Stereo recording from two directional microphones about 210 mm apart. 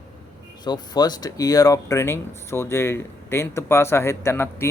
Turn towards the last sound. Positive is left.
turn(degrees=10)  # may be behind; listen again after turning